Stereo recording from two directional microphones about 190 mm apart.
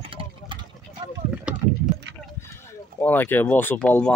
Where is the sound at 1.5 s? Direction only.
5° right (ahead or behind).